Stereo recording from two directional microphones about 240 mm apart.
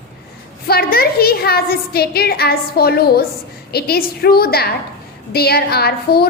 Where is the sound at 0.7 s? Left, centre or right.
Left.